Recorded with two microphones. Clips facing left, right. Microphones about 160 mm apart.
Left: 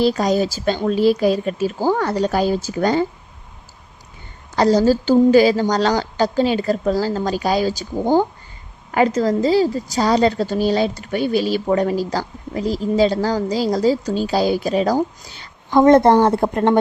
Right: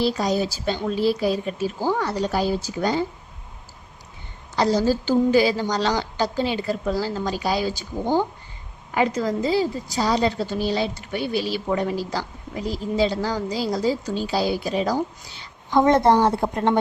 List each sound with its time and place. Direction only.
0.3 s a woman's voice: 90° left
1.8 s a woman's voice: 45° left (ahead or behind)
2.1 s speech: 60° left (ahead or behind)
4.5 s a woman's voice: 45° left (ahead or behind)